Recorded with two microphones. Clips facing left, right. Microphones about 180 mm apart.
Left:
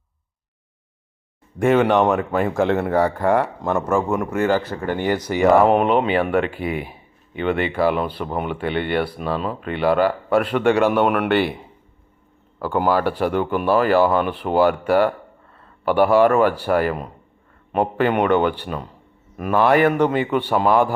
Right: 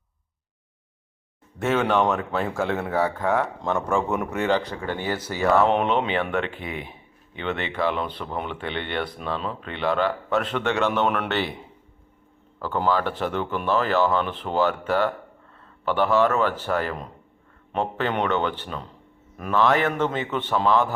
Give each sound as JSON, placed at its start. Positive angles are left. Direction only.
{"t": 1.6, "sound": "speech", "side_deg": 10}
{"t": 5.6, "sound": "speech", "side_deg": 5}
{"t": 12.6, "sound": "speech", "side_deg": 10}